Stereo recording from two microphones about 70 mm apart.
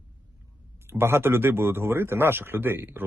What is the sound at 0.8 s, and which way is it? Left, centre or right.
Speech, right.